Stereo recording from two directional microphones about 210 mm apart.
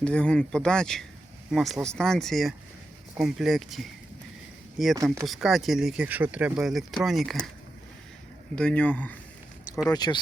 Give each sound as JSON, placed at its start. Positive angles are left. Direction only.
{"t": 0.0, "sound": "speech", "side_deg": 5}
{"t": 8.5, "sound": "speech", "side_deg": 5}
{"t": 9.7, "sound": "speech", "side_deg": 20}